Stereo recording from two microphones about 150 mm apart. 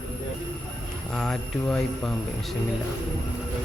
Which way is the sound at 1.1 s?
5° left (ahead or behind).